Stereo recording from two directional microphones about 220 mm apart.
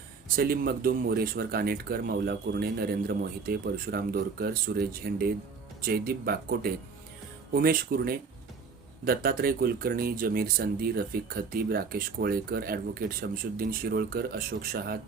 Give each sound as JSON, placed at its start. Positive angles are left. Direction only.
{"t": 0.3, "sound": "speech", "side_deg": -40}